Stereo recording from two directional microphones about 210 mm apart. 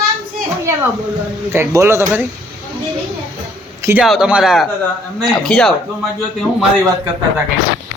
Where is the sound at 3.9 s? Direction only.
5° right (ahead or behind).